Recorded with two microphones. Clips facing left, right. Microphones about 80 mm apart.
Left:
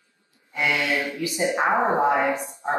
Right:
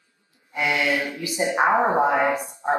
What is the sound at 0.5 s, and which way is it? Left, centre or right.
A woman's voice, right.